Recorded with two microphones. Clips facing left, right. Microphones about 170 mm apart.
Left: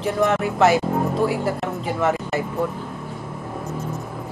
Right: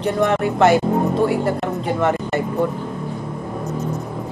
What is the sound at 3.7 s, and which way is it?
Music, 20° right (ahead or behind).